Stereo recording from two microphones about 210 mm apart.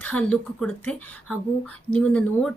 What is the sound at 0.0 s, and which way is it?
Speech, 5° left (ahead or behind).